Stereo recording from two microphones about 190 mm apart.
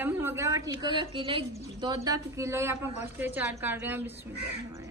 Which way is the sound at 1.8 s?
20° right (ahead or behind).